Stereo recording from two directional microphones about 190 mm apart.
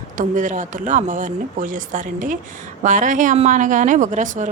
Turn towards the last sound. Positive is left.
turn(degrees=-40)  # may be behind; listen again after turning